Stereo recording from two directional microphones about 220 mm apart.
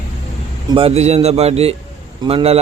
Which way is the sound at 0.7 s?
25° right (ahead or behind).